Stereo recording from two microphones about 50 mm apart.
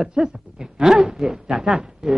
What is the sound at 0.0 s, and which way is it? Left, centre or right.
Speech, centre.